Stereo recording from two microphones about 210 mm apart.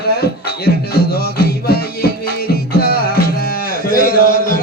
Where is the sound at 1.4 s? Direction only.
45° left (ahead or behind).